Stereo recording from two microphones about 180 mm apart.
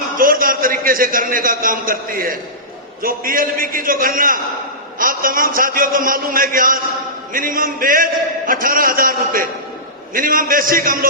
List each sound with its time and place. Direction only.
0.2 s a man's voice: 50° right (ahead or behind)